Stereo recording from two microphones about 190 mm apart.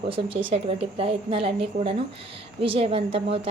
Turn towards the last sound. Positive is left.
turn(degrees=-30)  # may be behind; listen again after turning